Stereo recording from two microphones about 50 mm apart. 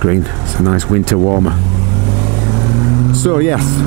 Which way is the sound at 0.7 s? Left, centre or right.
Right.